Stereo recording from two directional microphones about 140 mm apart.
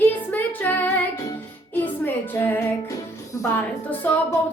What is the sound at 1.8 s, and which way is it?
Music, 15° left (ahead or behind).